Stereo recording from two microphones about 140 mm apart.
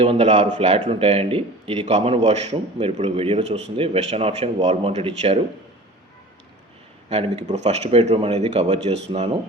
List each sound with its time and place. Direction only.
0.0 s a man's voice: 45° right (ahead or behind)
7.1 s a man's voice: 45° right (ahead or behind)